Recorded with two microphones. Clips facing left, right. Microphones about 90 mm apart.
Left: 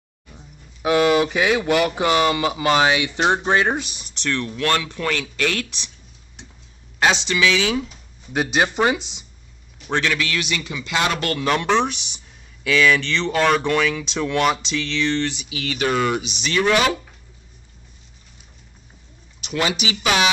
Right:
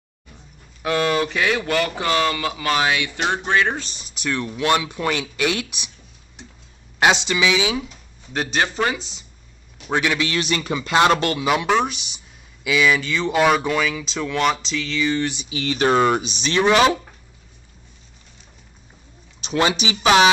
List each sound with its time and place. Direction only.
0.8 s speech: 10° left (ahead or behind)
4.0 s speech: 5° right (ahead or behind)
7.0 s speech: 15° right (ahead or behind)
8.3 s speech: 5° left (ahead or behind)
9.8 s a man's voice: 10° right (ahead or behind)
10.1 s speech: 25° right (ahead or behind)
10.4 s speech: 40° right (ahead or behind)
11.0 s speech: 35° right (ahead or behind)
11.2 s speech: 10° right (ahead or behind)
15.3 s speech: 25° right (ahead or behind)
16.5 s speech: 20° right (ahead or behind)
19.4 s speech: 30° right (ahead or behind)